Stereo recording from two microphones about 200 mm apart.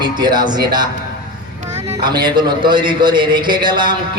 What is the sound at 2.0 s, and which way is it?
A man's voice, 20° right (ahead or behind).